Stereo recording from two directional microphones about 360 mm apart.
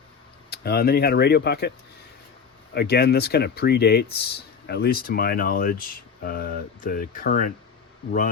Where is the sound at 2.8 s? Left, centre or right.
Left.